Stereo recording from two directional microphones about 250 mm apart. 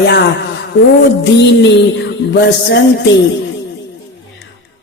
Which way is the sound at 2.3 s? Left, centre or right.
Left.